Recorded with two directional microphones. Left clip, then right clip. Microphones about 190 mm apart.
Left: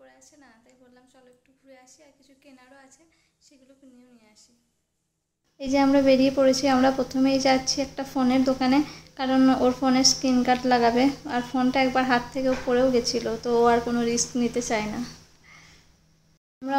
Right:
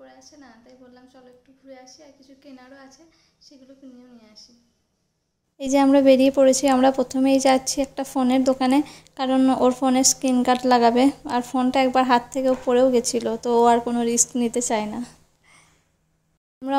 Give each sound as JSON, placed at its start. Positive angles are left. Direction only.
{"t": 0.3, "sound": "a woman's voice", "side_deg": -10}
{"t": 5.6, "sound": "a woman's voice", "side_deg": -50}
{"t": 15.5, "sound": "a sound", "side_deg": -45}